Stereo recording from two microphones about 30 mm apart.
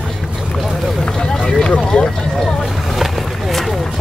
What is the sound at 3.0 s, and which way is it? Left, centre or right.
Vehicle, centre.